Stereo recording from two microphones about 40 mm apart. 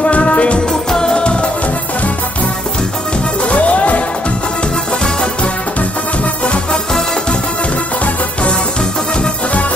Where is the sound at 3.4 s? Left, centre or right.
Left.